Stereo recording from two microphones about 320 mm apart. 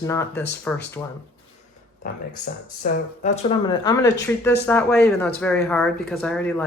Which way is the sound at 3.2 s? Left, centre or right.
Centre.